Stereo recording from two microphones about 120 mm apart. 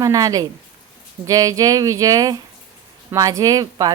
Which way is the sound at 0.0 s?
30° right (ahead or behind).